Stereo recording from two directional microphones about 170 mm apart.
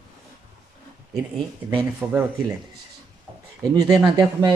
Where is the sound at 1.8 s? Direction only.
10° right (ahead or behind).